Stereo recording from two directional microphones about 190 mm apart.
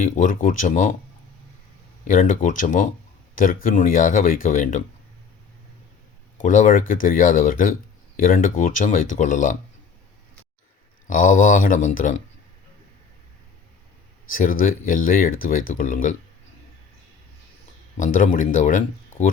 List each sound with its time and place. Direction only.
0.0 s speech: 45° left (ahead or behind)
2.0 s speech: 45° left (ahead or behind)
6.4 s speech: 40° left (ahead or behind)
11.1 s speech: 45° left (ahead or behind)
14.3 s speech: 45° left (ahead or behind)
17.9 s speech: 45° left (ahead or behind)